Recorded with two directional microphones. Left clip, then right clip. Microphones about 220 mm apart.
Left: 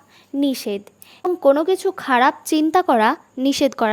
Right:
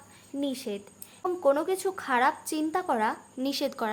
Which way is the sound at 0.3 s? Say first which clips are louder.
Left 11 dB; 40° left (ahead or behind).